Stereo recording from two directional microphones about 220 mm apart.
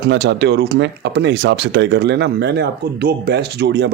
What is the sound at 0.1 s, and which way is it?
Speech, 50° right (ahead or behind).